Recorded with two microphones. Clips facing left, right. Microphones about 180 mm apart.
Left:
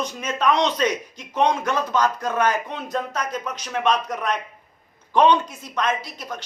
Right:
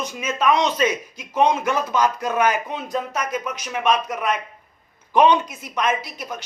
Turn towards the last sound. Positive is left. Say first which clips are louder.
# right 2 dB
turn(degrees=-10)  # may be behind; listen again after turning